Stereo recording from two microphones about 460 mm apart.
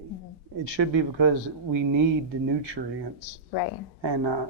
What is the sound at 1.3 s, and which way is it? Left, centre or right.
Speech, right.